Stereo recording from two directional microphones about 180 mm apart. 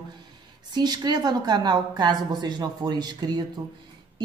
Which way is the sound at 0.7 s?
25° right (ahead or behind).